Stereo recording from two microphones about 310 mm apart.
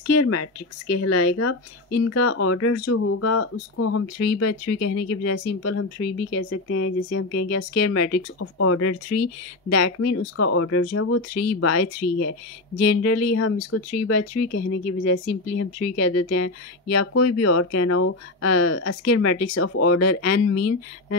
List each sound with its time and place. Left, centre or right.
0.0 s speech: left